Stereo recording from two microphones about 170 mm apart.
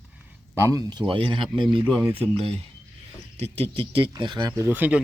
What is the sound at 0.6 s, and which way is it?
Speech, 20° right (ahead or behind).